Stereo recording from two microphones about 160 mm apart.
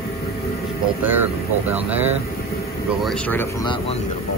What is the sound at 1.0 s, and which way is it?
Speech, 10° right (ahead or behind).